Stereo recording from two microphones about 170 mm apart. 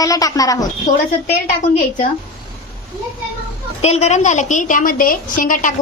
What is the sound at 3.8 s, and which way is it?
A woman's voice, 40° left (ahead or behind).